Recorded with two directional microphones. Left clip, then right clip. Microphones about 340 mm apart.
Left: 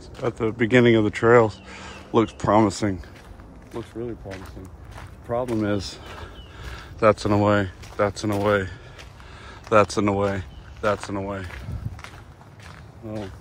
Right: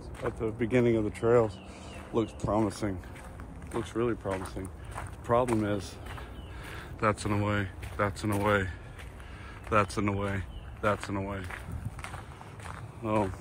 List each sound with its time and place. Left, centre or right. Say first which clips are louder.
0.4 s speech: left 9 dB; left
3.7 s speech: right 2 dB; centre
4.9 s a sound: even; centre
5.6 s speech: left 7 dB; left
6.7 s speech: left 11 dB; centre
13.0 s speech: right 5 dB; centre